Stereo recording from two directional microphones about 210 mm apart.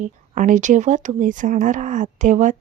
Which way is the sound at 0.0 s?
35° right (ahead or behind).